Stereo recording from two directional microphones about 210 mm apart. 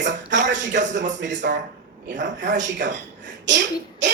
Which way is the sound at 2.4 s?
35° right (ahead or behind).